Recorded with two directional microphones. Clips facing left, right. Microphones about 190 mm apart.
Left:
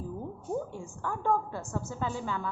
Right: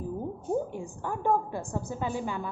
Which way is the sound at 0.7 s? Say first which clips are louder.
Right 2 dB; 15° right (ahead or behind).